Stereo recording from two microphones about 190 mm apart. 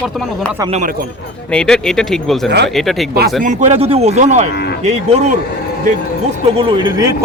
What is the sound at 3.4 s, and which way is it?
Speech, 40° right (ahead or behind).